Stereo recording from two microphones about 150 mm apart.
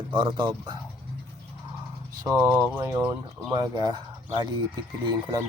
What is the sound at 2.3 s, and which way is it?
A man's voice, 15° right (ahead or behind).